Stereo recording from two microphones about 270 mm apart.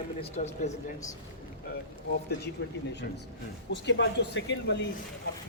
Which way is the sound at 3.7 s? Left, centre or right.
Left.